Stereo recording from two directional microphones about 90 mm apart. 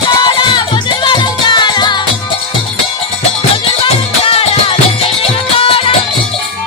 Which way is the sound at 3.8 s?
90° left.